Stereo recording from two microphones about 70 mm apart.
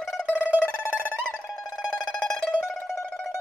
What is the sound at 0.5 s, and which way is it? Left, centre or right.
Music, centre.